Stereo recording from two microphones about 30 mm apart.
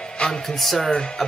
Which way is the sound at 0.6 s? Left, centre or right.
Centre.